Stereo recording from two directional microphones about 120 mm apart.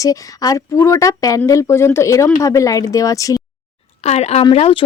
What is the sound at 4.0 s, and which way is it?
Speech, 65° left (ahead or behind).